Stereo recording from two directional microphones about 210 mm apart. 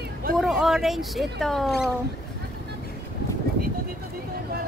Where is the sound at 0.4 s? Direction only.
Centre (ahead or behind).